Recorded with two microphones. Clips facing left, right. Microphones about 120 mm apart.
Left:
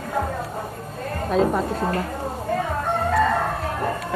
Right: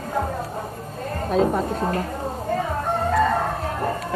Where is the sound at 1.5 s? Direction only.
35° right (ahead or behind).